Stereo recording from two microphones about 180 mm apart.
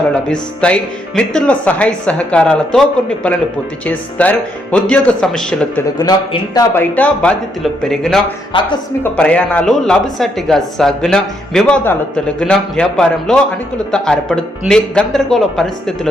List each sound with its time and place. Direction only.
0.3 s speech: 5° left (ahead or behind)
6.0 s speech: 20° left (ahead or behind)
6.9 s a woman's voice: 5° left (ahead or behind)